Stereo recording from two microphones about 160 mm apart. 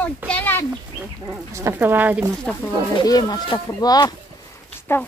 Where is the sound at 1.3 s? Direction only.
20° right (ahead or behind).